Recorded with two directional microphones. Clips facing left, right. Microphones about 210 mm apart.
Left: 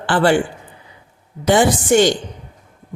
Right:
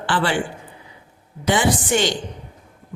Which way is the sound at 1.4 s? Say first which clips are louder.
Left 5 dB; 45° left (ahead or behind).